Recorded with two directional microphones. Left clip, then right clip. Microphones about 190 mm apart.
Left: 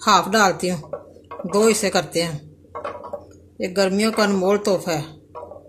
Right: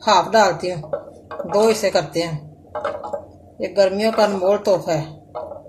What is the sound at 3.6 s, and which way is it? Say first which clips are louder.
Speech: right 3 dB; 50° left (ahead or behind).